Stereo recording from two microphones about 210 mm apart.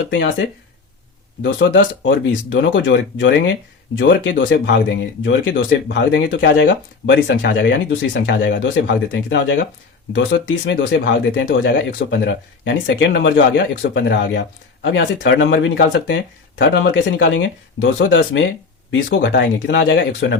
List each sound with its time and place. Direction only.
0.1 s speech: 60° left (ahead or behind)